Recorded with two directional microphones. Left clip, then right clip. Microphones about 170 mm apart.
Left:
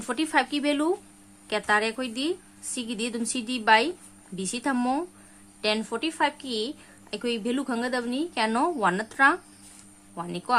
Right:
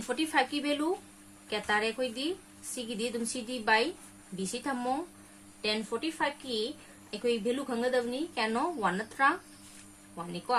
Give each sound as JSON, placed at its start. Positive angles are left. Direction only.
{"t": 0.0, "sound": "a woman's voice", "side_deg": 45}